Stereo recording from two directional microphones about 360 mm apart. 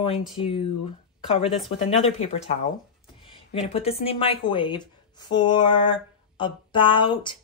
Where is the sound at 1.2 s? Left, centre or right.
Centre.